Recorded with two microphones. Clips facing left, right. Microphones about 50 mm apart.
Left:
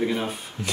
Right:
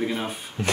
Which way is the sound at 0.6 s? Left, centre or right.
Right.